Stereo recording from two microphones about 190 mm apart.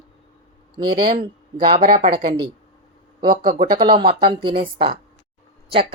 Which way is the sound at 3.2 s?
25° right (ahead or behind).